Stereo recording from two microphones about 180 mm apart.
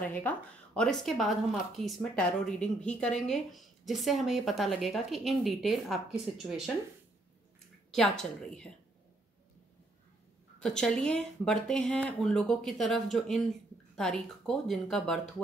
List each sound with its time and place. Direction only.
0.0 s speech: 10° left (ahead or behind)
7.9 s speech: 5° left (ahead or behind)
10.6 s speech: 5° left (ahead or behind)